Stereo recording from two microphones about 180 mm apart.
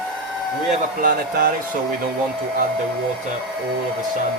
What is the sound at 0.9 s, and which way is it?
Speech, 50° right (ahead or behind).